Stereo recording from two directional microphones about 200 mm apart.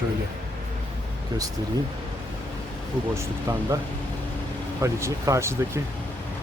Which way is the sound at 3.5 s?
15° right (ahead or behind).